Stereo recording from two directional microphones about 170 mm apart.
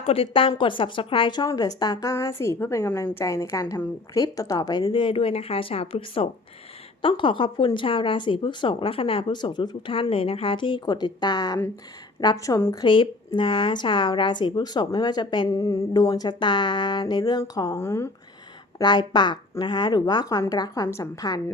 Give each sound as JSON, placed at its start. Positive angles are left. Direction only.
{"t": 0.0, "sound": "speech", "side_deg": 35}
{"t": 12.8, "sound": "speech", "side_deg": 30}
{"t": 18.8, "sound": "speech", "side_deg": 25}